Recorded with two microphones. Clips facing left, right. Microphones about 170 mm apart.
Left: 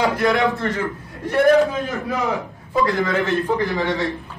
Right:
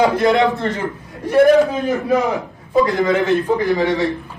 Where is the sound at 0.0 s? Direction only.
25° right (ahead or behind).